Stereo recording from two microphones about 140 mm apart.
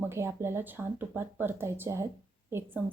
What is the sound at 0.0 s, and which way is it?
A woman's voice, 20° right (ahead or behind).